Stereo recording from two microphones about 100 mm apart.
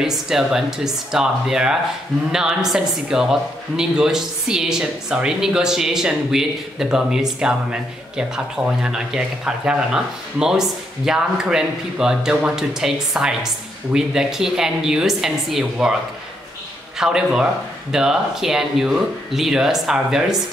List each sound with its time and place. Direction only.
0.0 s a woman's voice: 5° right (ahead or behind)
17.0 s a woman's voice: 5° right (ahead or behind)